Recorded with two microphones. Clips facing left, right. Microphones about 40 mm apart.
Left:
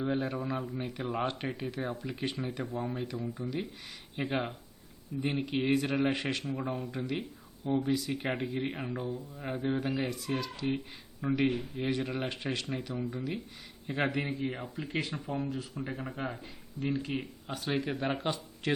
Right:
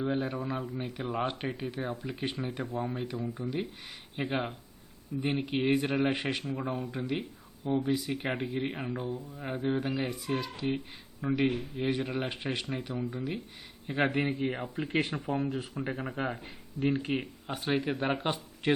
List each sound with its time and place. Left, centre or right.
0.0 s speech: centre
9.0 s speech: right
9.3 s speech: centre
14.1 s speech: right
17.2 s speech: right